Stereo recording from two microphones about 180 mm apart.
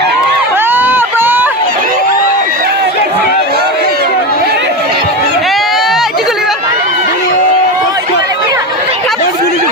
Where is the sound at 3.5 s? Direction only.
60° right (ahead or behind).